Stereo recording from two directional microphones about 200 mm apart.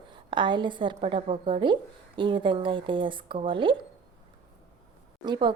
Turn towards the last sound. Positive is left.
turn(degrees=-20)  # may be behind; listen again after turning